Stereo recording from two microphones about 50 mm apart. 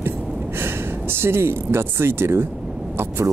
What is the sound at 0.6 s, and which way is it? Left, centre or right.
Speech, right.